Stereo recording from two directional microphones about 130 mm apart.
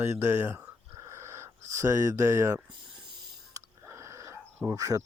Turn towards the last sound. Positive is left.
turn(degrees=-25)  # may be behind; listen again after turning